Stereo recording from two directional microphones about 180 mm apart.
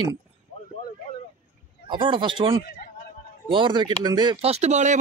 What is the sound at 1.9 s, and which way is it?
Speech, 25° right (ahead or behind).